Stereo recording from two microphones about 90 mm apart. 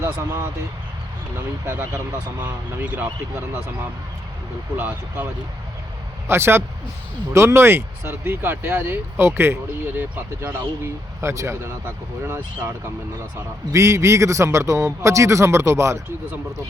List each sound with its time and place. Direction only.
0.0 s speech: 25° right (ahead or behind)
1.6 s speech: 30° right (ahead or behind)
2.4 s speech: 15° right (ahead or behind)
4.8 s speech: 20° right (ahead or behind)
11.2 s speech: 30° right (ahead or behind)
13.7 s a man's voice: 35° right (ahead or behind)